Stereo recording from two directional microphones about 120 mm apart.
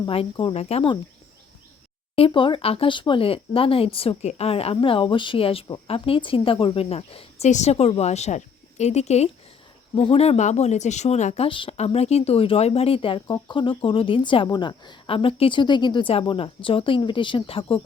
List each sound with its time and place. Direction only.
0.1 s a woman's voice: 50° left (ahead or behind)
2.1 s speech: 45° left (ahead or behind)
4.2 s a woman's voice: 65° left (ahead or behind)
11.4 s speech: 45° left (ahead or behind)
11.8 s speech: 65° left (ahead or behind)